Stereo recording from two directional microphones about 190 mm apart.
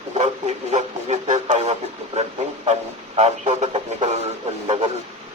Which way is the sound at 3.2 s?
35° right (ahead or behind).